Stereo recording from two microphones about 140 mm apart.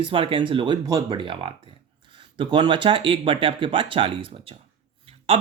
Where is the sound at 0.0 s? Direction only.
40° right (ahead or behind).